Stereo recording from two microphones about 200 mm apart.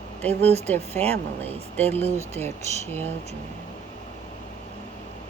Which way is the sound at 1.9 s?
10° left (ahead or behind).